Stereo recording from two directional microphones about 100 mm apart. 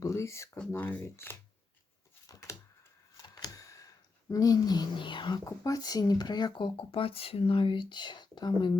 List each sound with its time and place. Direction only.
0.0 s speech: 30° left (ahead or behind)
0.7 s speech: 20° left (ahead or behind)
2.2 s a sound: 35° left (ahead or behind); by 5.4 s 50° left (ahead or behind)
5.5 s speech: 40° left (ahead or behind)